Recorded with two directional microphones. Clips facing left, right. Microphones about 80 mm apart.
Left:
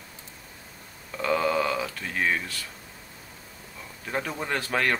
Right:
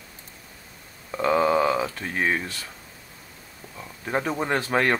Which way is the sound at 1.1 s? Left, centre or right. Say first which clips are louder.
Right 4 dB; right.